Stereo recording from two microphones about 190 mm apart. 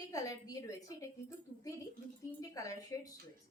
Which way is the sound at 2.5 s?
15° left (ahead or behind).